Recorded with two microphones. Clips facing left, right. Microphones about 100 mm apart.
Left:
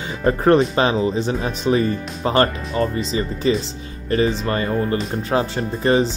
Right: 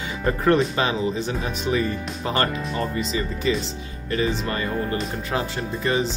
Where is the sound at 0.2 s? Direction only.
35° left (ahead or behind).